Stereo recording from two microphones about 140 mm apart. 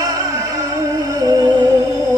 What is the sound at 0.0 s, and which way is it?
Music, 25° right (ahead or behind).